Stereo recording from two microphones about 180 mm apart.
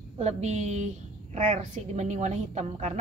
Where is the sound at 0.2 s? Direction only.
40° right (ahead or behind).